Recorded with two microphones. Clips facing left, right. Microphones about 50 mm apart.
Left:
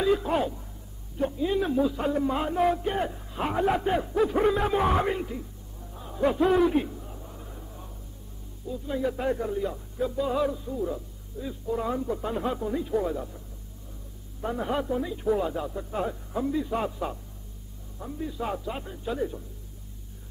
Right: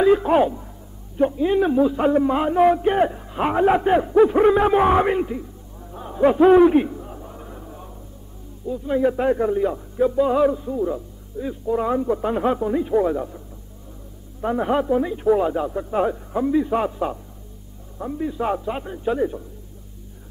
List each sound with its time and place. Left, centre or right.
0.0 s a man's voice: right
5.9 s a sound: right
8.6 s a man's voice: right
14.4 s a man's voice: right